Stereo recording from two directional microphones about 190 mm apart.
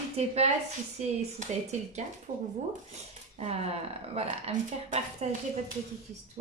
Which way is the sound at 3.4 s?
35° right (ahead or behind).